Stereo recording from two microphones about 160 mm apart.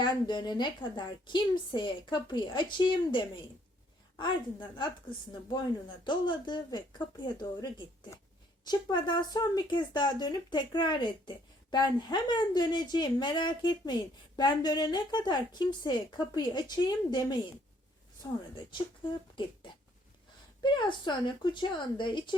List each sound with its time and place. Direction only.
0.0 s speech: 30° left (ahead or behind)
6.1 s speech: 30° left (ahead or behind)
20.6 s speech: 30° left (ahead or behind)